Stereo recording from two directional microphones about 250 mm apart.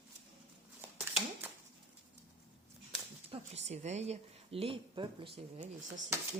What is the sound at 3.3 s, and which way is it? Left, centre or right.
A woman's voice, right.